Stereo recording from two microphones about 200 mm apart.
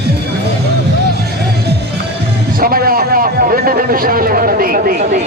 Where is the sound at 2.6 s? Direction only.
45° right (ahead or behind).